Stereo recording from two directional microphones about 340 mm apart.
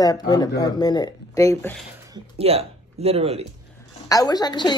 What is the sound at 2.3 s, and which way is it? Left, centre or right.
Speech, centre.